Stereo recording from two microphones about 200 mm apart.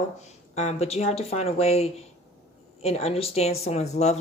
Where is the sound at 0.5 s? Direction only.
35° left (ahead or behind).